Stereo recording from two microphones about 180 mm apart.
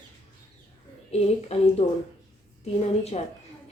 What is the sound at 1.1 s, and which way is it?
Speech, 35° left (ahead or behind).